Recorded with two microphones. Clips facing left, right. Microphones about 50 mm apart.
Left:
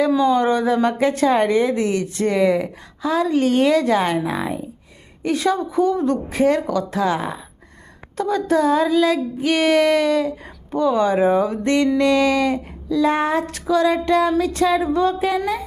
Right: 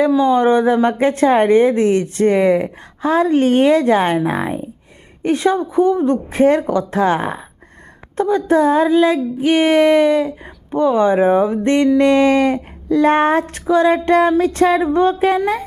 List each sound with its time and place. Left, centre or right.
0.2 s a woman's voice: right
8.1 s female singing: right
11.9 s a woman's voice: right